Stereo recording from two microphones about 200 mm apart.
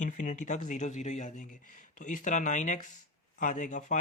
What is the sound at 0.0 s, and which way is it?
Speech, 40° left (ahead or behind).